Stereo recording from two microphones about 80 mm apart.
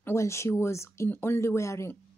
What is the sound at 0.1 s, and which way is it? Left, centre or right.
Speech, left.